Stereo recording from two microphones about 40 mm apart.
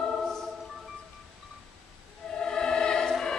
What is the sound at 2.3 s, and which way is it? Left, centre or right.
Music, centre.